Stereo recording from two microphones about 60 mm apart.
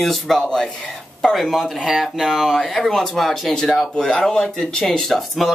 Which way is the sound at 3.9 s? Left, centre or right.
Centre.